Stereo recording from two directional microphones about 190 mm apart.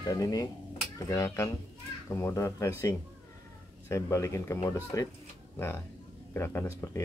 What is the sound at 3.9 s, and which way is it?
Speech, 15° left (ahead or behind).